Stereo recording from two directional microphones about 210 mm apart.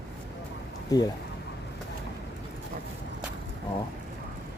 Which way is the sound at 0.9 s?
15° left (ahead or behind).